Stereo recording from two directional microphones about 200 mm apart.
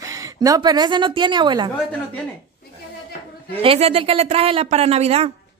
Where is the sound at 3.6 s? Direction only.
30° right (ahead or behind).